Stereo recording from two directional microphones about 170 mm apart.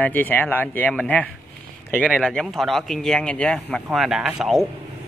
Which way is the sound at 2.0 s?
5° right (ahead or behind).